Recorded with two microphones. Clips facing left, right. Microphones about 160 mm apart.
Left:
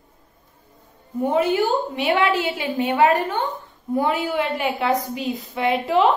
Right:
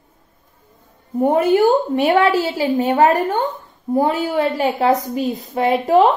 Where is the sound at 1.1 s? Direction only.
50° right (ahead or behind).